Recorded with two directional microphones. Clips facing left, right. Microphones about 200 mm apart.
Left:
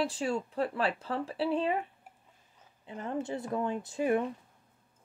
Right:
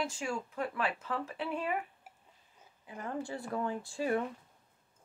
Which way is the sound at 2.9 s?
25° left (ahead or behind).